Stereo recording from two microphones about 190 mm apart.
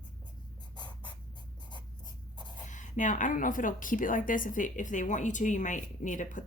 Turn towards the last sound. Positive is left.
turn(degrees=40)  # may be behind; listen again after turning